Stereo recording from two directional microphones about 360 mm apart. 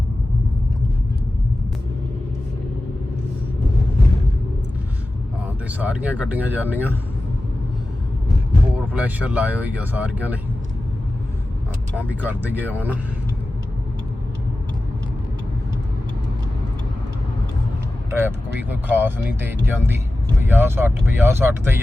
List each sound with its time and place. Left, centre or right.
5.6 s speech: centre
8.9 s speech: centre
11.9 s speech: centre
18.1 s speech: centre